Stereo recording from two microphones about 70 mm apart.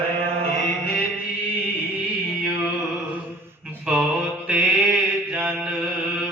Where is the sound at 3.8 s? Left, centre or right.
Centre.